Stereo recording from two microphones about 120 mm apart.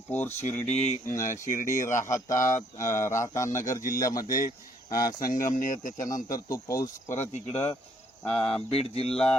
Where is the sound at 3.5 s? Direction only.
25° left (ahead or behind).